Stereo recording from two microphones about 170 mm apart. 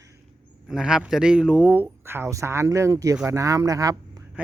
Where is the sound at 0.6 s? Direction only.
5° right (ahead or behind); by 4.0 s 20° right (ahead or behind).